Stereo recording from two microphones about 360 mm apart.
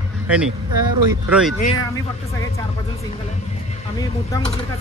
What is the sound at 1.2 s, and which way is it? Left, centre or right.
Speech, centre.